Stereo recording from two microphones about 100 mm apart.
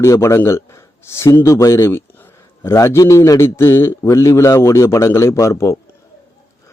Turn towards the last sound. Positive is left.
turn(degrees=30)  # may be behind; listen again after turning